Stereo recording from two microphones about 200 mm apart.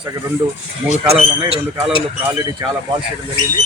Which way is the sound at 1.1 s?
30° right (ahead or behind).